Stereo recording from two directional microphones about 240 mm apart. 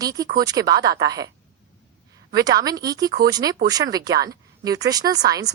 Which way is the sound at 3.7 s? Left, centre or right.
Centre.